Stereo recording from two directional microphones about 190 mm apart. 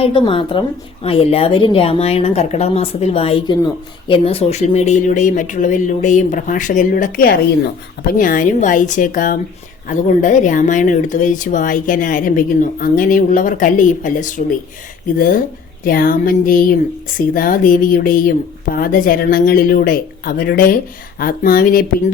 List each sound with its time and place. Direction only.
0.0 s a woman's voice: 25° left (ahead or behind); by 14.4 s 45° left (ahead or behind)
15.8 s speech: 50° left (ahead or behind)